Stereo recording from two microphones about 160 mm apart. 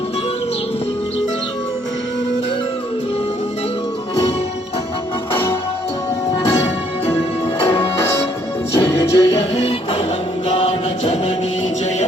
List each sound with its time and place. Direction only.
5.3 s music: 15° left (ahead or behind)
8.7 s music: 15° left (ahead or behind)
10.5 s music: 40° left (ahead or behind)